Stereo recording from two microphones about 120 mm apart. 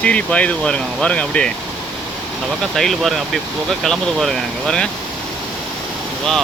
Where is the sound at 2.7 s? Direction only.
5° left (ahead or behind).